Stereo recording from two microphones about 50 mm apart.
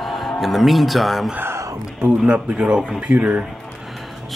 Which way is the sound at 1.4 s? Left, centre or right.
Right.